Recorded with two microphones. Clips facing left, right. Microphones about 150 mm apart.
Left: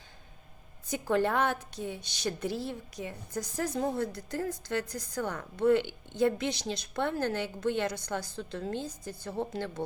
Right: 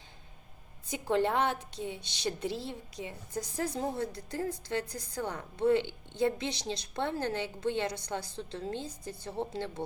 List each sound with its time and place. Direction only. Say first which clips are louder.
0.9 s a woman's voice: left 1 dB; 20° right (ahead or behind)